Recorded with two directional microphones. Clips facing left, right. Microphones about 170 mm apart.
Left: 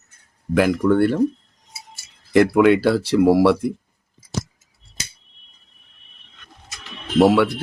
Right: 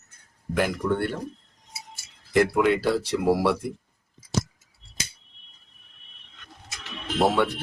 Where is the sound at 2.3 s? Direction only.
85° left.